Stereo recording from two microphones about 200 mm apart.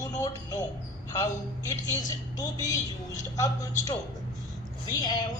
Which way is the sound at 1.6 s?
20° left (ahead or behind).